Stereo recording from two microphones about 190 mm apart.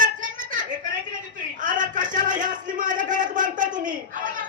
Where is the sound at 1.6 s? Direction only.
45° right (ahead or behind).